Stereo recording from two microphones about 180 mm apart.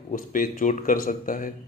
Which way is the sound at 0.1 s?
50° left (ahead or behind).